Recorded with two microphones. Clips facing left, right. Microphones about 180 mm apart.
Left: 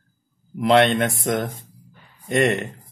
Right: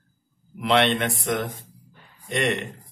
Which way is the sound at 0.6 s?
45° left (ahead or behind).